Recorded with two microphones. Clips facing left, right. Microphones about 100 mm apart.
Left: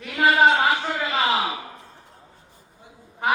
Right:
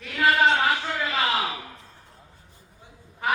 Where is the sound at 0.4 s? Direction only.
30° left (ahead or behind).